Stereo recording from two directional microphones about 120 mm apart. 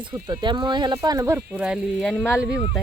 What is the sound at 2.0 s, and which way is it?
Speech, 5° left (ahead or behind).